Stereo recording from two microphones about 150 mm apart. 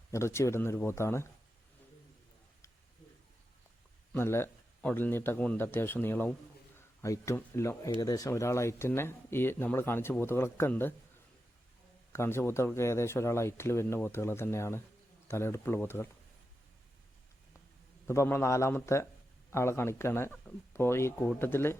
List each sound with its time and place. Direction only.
0.1 s speech: 20° left (ahead or behind)
4.1 s speech: 15° left (ahead or behind)
12.1 s speech: 15° left (ahead or behind)
18.0 s speech: 15° left (ahead or behind)